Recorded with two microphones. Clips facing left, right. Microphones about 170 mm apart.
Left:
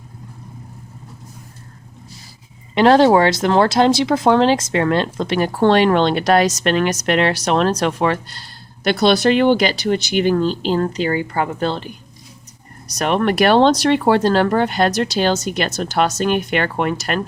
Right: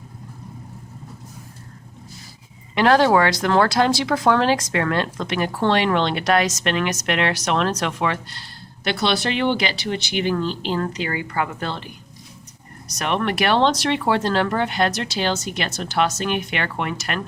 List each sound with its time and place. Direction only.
2.7 s speech: 30° left (ahead or behind)
12.9 s speech: 40° left (ahead or behind)